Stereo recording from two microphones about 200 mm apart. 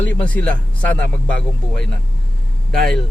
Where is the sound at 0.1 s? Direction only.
5° left (ahead or behind).